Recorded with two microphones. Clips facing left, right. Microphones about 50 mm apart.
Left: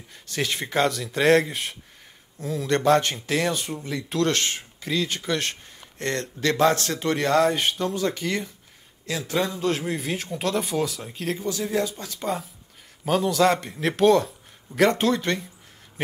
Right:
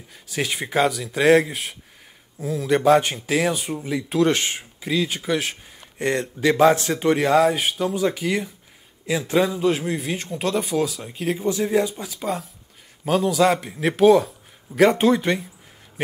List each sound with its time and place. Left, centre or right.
0.1 s a man's voice: centre
9.0 s a man's voice: right; by 11.4 s centre
11.4 s speech: right
12.0 s a man's voice: centre